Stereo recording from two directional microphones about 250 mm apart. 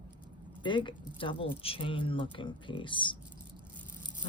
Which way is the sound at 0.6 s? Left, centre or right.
Centre.